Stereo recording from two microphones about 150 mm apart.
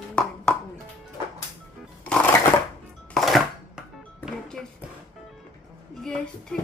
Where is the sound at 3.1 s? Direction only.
Centre (ahead or behind).